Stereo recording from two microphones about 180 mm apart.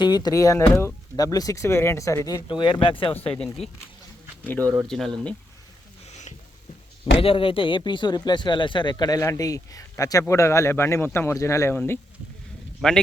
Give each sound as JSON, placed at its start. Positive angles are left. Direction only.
{"t": 0.0, "sound": "speech", "side_deg": 20}
{"t": 3.3, "sound": "speech", "side_deg": 5}
{"t": 7.2, "sound": "speech", "side_deg": 30}
{"t": 12.8, "sound": "speech", "side_deg": 0}